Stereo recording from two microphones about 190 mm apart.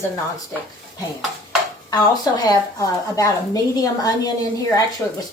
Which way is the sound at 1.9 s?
20° left (ahead or behind).